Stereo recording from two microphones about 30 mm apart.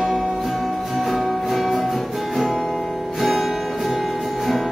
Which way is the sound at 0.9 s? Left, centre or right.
Centre.